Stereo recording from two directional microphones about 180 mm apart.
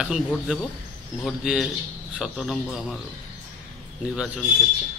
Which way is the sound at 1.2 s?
Centre (ahead or behind).